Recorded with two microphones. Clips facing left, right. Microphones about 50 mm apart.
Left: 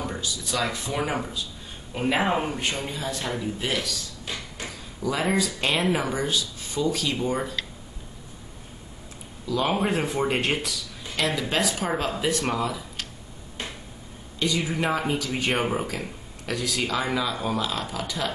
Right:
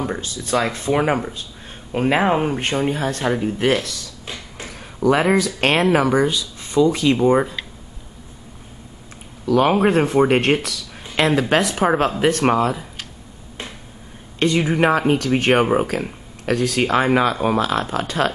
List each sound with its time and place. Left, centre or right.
0.0 s speech: right
2.1 s speech: right
2.5 s speech: right
9.5 s speech: right
11.1 s speech: right
14.4 s speech: right